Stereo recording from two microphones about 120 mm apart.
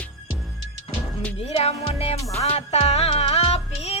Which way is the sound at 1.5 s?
55° left (ahead or behind).